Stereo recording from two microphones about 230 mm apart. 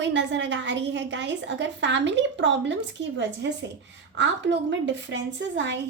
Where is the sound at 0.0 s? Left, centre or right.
Right.